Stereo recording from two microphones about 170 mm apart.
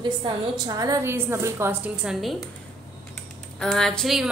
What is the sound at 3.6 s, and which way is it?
Speech, 5° left (ahead or behind).